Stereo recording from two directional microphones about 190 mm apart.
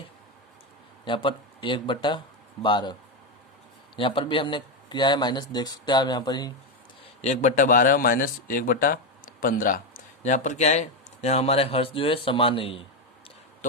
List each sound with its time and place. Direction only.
1.0 s speech: 25° left (ahead or behind)
3.9 s speech: 25° left (ahead or behind)
7.0 s a man's voice: 35° left (ahead or behind)